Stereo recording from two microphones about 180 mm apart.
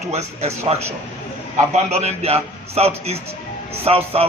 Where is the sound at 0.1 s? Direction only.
35° right (ahead or behind).